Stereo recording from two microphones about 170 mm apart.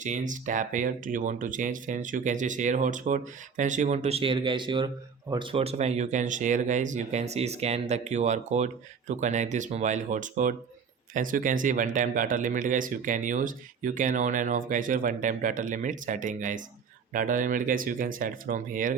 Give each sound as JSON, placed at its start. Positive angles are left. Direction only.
{"t": 0.0, "sound": "speech", "side_deg": -45}